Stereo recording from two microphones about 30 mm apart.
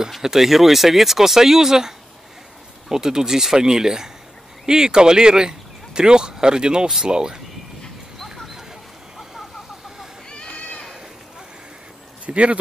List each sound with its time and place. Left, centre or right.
0.2 s speech: centre; by 7.3 s right
10.3 s a sound: left
12.3 s speech: right